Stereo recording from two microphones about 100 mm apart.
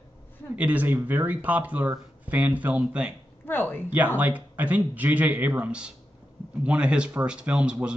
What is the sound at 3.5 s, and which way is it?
Speech, 20° left (ahead or behind).